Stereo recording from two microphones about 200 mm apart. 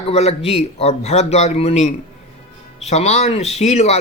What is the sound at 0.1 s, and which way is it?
Speech, 30° left (ahead or behind).